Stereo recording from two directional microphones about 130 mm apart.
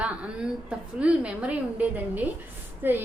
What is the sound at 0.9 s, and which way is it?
A woman's voice, 10° right (ahead or behind).